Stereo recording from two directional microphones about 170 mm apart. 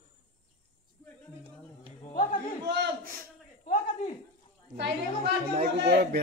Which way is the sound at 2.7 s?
80° right.